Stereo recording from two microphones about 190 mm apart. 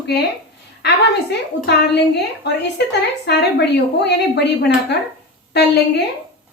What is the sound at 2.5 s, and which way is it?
Speech, 65° left (ahead or behind).